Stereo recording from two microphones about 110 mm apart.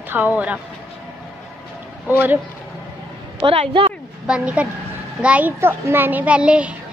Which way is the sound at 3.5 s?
55° right (ahead or behind).